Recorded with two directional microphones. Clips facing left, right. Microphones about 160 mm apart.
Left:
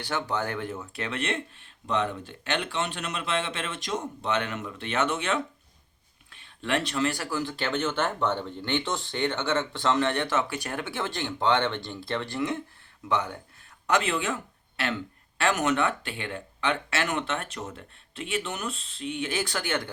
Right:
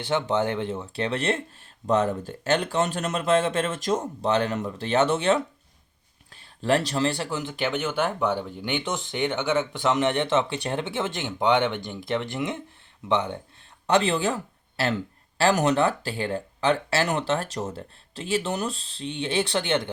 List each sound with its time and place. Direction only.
0.0 s speech: 25° right (ahead or behind)